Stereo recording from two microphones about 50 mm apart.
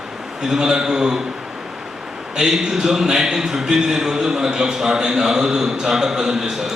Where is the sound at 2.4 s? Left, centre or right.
Centre.